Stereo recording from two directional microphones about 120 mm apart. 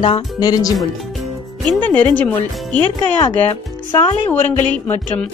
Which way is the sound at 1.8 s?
15° left (ahead or behind).